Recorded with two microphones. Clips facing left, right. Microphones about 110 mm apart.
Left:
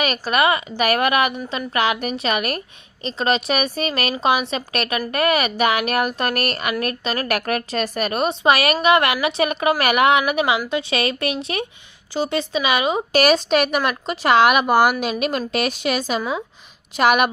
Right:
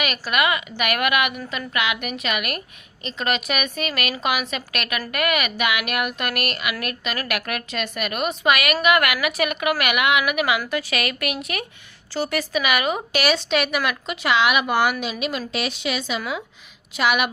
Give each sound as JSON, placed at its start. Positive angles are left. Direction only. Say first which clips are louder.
{"t": 0.0, "sound": "a woman's voice", "louder": "left 4 dB", "side_deg": 35}
{"t": 13.1, "sound": "a woman's voice", "louder": "left 6 dB", "side_deg": 40}